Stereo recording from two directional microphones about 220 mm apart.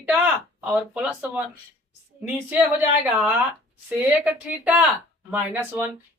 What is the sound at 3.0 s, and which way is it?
A woman's voice, 5° right (ahead or behind).